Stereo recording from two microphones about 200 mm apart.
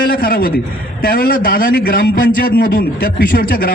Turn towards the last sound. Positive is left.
turn(degrees=45)  # may be behind; listen again after turning